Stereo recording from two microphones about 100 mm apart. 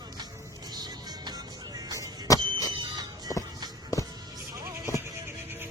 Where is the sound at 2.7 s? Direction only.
45° right (ahead or behind).